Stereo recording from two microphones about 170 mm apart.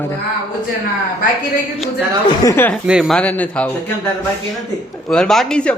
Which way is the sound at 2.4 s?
15° left (ahead or behind).